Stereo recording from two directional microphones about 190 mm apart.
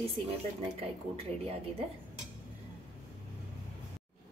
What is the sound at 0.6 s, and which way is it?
Speech, 30° right (ahead or behind).